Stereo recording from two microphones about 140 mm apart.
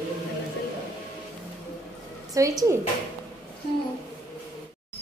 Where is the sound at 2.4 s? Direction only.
25° right (ahead or behind).